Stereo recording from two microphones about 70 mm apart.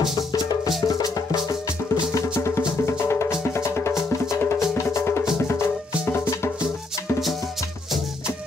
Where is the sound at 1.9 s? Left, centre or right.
Left.